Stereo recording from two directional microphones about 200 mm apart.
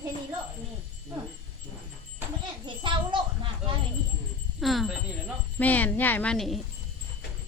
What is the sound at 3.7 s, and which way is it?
Wind chime, 25° right (ahead or behind).